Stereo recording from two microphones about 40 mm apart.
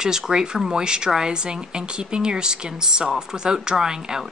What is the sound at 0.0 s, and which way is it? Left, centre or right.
Speech, centre.